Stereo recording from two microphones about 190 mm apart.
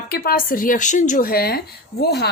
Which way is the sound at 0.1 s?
50° left (ahead or behind).